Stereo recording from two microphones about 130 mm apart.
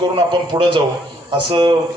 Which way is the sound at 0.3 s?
35° right (ahead or behind).